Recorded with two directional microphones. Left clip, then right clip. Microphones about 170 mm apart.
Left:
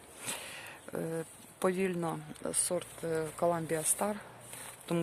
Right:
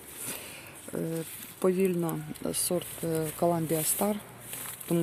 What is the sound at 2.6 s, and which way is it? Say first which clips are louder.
Speech: right 4 dB; 15° right (ahead or behind).